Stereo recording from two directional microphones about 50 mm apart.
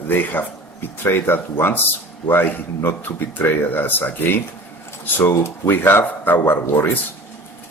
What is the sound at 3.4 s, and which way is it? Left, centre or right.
Speech, left.